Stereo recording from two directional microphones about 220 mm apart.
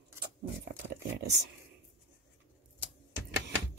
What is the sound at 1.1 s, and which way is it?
Speech, 50° right (ahead or behind).